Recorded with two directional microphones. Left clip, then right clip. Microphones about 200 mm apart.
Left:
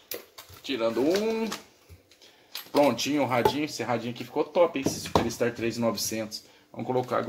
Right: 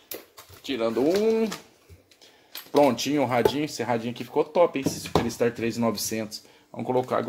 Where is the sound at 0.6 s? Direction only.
50° right (ahead or behind).